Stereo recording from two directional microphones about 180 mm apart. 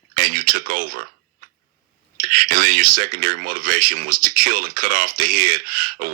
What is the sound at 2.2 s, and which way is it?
Speech, 50° right (ahead or behind).